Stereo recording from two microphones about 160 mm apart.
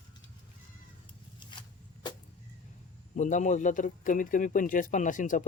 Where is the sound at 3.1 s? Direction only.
50° left (ahead or behind).